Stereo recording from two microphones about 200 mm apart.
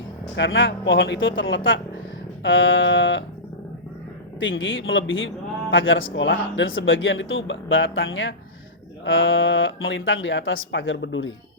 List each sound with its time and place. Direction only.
0.3 s speech: 70° left (ahead or behind)
4.4 s speech: 70° left (ahead or behind)